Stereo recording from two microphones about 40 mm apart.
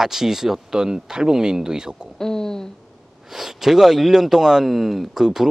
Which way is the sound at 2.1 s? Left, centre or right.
Centre.